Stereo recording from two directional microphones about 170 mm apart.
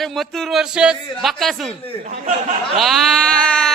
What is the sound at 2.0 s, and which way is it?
Speech, 40° right (ahead or behind).